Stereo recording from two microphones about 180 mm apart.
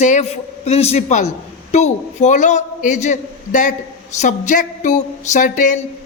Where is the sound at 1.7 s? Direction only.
40° left (ahead or behind).